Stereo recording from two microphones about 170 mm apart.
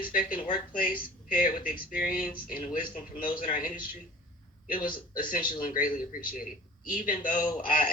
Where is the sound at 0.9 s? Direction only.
60° left (ahead or behind).